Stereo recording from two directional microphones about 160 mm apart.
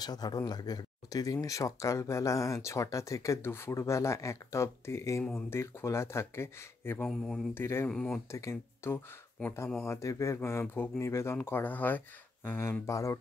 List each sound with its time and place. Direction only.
0.0 s speech: 25° left (ahead or behind)
7.9 s speech: 5° left (ahead or behind)
8.3 s speech: 15° left (ahead or behind)